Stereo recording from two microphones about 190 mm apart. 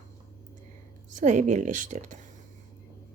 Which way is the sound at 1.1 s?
40° right (ahead or behind).